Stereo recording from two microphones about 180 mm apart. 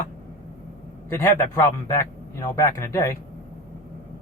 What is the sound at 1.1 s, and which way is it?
A man's voice, 15° left (ahead or behind).